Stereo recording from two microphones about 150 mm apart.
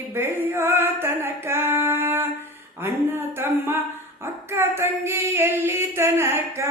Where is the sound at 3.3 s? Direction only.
15° right (ahead or behind).